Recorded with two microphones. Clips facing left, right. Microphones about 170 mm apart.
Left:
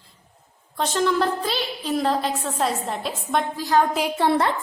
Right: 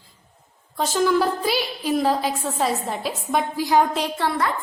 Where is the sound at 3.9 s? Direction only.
10° left (ahead or behind).